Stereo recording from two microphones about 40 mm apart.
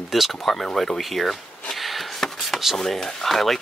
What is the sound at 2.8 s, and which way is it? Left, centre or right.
Speech, centre.